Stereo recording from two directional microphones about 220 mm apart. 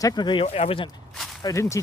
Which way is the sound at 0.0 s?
20° left (ahead or behind).